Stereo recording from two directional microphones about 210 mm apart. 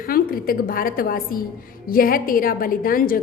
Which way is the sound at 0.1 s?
45° left (ahead or behind).